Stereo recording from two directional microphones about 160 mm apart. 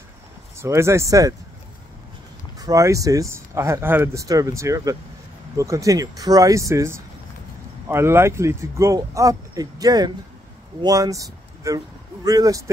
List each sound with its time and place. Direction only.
0.6 s speech: 15° right (ahead or behind)
2.6 s speech: 20° right (ahead or behind)